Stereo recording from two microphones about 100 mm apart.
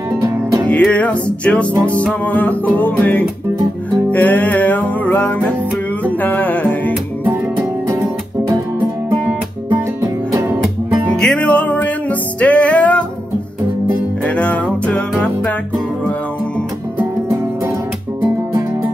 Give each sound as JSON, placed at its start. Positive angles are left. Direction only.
{"t": 0.7, "sound": "music", "side_deg": 15}
{"t": 11.1, "sound": "music", "side_deg": 10}
{"t": 14.2, "sound": "music", "side_deg": 10}